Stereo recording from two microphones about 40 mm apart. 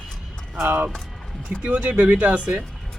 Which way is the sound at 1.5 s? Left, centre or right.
Right.